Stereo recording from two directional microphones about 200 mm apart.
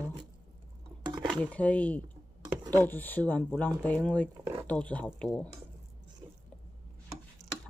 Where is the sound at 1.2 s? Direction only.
5° left (ahead or behind).